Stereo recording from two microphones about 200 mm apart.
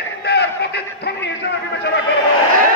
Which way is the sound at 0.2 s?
55° left (ahead or behind).